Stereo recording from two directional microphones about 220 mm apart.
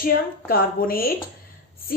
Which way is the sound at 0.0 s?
40° left (ahead or behind).